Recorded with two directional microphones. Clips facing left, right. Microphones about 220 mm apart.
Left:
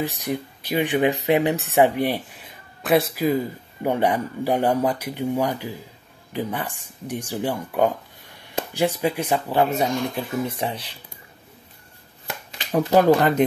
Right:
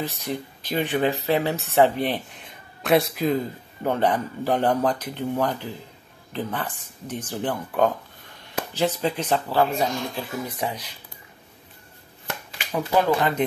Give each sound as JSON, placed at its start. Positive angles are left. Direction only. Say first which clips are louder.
{"t": 0.0, "sound": "speech", "louder": "left 3 dB", "side_deg": 15}
{"t": 12.7, "sound": "speech", "louder": "left 5 dB", "side_deg": 40}